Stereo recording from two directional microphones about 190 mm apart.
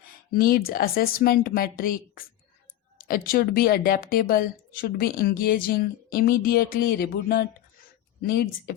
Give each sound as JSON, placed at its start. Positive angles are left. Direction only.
{"t": 0.3, "sound": "speech", "side_deg": 50}